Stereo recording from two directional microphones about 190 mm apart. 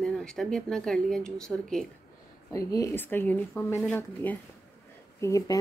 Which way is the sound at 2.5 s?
20° left (ahead or behind).